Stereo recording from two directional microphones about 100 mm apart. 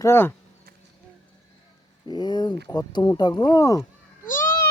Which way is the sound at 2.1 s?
45° left (ahead or behind).